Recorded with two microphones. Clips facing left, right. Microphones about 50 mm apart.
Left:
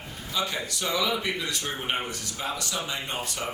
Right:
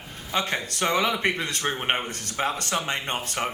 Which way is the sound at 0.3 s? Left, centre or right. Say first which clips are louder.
Right 3 dB; right.